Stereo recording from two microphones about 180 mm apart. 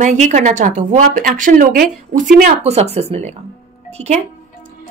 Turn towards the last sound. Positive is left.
turn(degrees=-35)  # may be behind; listen again after turning